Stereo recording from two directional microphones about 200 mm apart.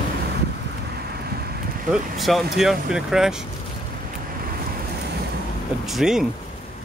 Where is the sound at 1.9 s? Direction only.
Centre (ahead or behind).